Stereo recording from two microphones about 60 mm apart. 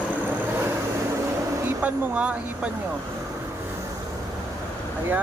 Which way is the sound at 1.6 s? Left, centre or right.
Right.